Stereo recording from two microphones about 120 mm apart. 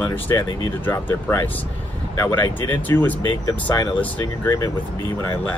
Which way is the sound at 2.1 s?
20° left (ahead or behind).